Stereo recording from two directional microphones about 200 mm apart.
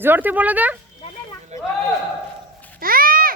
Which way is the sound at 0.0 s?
10° right (ahead or behind).